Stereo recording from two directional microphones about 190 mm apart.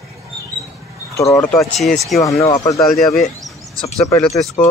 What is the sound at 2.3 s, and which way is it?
Speech, 30° left (ahead or behind).